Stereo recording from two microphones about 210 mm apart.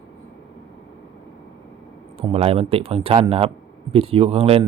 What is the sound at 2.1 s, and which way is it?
Speech, 25° right (ahead or behind).